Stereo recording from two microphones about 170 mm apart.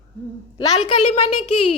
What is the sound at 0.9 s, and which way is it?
Speech, 30° left (ahead or behind).